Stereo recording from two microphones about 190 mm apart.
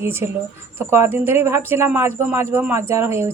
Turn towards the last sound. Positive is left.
turn(degrees=-15)  # may be behind; listen again after turning